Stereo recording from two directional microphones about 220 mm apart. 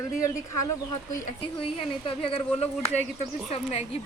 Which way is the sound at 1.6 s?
25° left (ahead or behind).